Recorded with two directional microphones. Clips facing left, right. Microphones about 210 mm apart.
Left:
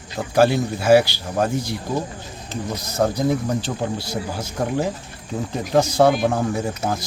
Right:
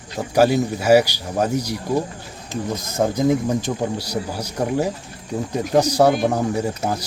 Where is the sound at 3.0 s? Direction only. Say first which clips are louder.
Right 2 dB; 15° right (ahead or behind).